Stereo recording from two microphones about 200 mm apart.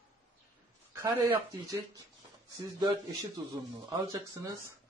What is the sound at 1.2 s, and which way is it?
A man's voice, 10° right (ahead or behind).